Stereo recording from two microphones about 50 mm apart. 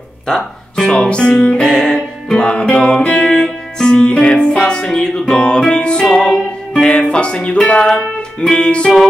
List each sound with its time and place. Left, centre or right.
0.3 s guitar: centre
5.7 s music: centre